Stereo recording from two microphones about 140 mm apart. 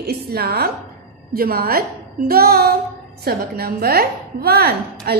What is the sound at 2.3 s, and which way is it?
Female singing, 90° right.